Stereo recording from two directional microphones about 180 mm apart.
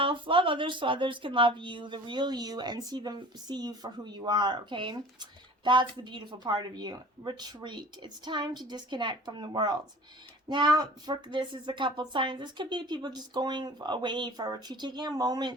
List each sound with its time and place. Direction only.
0.0 s speech: 30° right (ahead or behind)